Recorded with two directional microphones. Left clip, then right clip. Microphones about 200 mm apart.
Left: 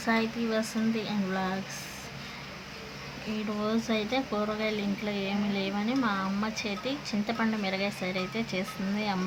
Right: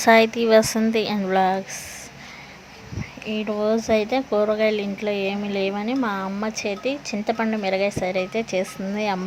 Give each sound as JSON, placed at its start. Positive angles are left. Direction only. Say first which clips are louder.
{"t": 0.0, "sound": "a woman's voice", "louder": "right 14 dB", "side_deg": -45}
{"t": 3.3, "sound": "speech", "louder": "right 10 dB", "side_deg": -30}